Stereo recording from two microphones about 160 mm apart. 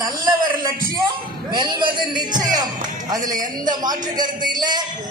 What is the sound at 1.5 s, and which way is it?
Speech, 30° right (ahead or behind).